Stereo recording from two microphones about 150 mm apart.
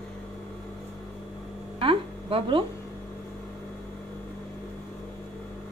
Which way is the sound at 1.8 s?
35° right (ahead or behind).